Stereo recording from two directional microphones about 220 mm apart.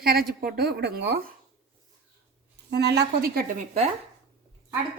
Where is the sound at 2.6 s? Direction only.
50° right (ahead or behind).